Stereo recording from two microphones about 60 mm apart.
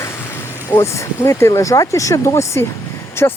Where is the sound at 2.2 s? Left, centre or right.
Left.